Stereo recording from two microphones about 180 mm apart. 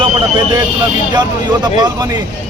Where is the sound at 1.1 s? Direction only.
25° right (ahead or behind).